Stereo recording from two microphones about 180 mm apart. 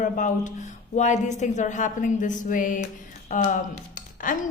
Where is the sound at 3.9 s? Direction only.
45° left (ahead or behind).